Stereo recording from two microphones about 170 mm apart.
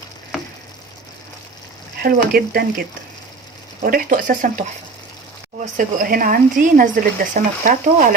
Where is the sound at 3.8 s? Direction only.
55° right (ahead or behind).